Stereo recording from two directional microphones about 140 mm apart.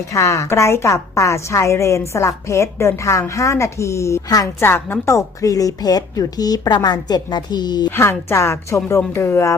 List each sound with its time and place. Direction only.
0.1 s a woman's voice: 20° left (ahead or behind)
7.9 s speech: 15° left (ahead or behind)